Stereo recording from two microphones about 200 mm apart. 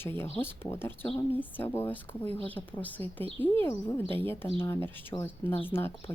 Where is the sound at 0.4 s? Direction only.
10° left (ahead or behind).